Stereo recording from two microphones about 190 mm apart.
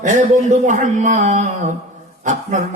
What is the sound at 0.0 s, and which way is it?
A man's voice, 40° right (ahead or behind).